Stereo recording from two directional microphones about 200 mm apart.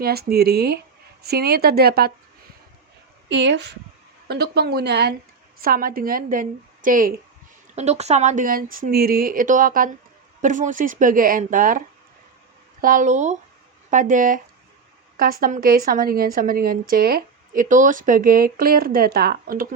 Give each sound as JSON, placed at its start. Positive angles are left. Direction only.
{"t": 0.0, "sound": "a woman's voice", "side_deg": -50}
{"t": 3.2, "sound": "a woman's voice", "side_deg": -60}
{"t": 7.8, "sound": "a woman's voice", "side_deg": -35}
{"t": 12.8, "sound": "a woman's voice", "side_deg": -40}